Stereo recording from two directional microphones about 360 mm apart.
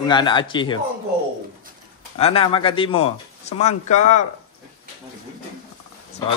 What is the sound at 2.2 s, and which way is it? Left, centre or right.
Speech, centre.